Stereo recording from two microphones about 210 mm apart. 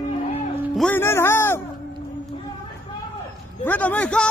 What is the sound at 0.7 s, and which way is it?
Speech, 5° left (ahead or behind).